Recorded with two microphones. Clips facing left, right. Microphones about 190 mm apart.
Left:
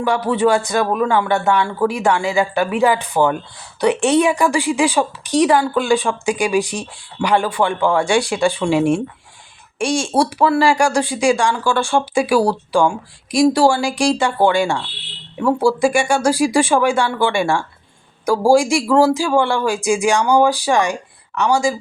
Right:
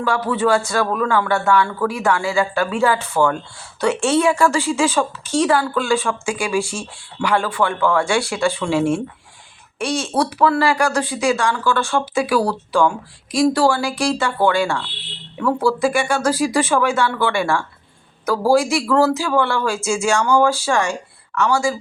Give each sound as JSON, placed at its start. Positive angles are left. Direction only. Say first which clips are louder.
{"t": 0.0, "sound": "a woman's voice", "louder": "left 3 dB", "side_deg": 15}